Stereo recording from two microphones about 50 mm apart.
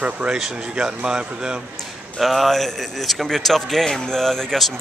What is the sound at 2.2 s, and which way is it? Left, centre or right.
A man's voice, centre.